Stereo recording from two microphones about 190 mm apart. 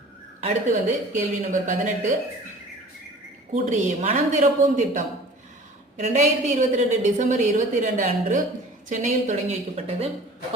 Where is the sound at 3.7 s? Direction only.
40° right (ahead or behind).